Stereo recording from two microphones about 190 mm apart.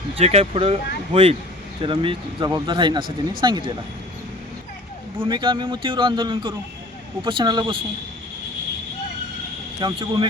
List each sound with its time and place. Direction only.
0.2 s a man's voice: 30° right (ahead or behind)
5.2 s a man's voice: 25° right (ahead or behind)
9.8 s a man's voice: 20° right (ahead or behind)